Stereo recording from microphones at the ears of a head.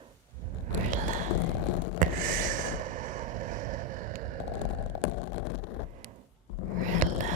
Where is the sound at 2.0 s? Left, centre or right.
Right.